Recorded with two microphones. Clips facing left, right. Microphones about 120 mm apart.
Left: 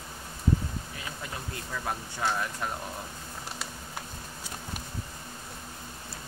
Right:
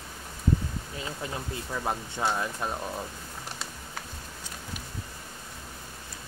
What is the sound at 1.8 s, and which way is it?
Speech, 25° right (ahead or behind).